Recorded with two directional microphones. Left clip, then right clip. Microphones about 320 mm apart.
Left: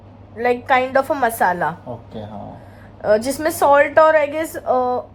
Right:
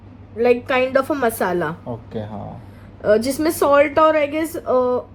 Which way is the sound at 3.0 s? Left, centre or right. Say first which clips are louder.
Even; centre.